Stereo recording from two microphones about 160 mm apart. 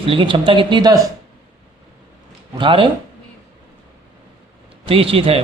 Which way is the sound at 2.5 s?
30° right (ahead or behind).